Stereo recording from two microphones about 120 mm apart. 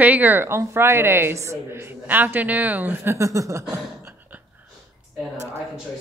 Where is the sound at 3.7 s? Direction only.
20° right (ahead or behind).